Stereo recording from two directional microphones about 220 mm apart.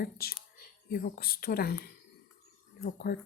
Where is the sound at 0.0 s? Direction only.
45° left (ahead or behind).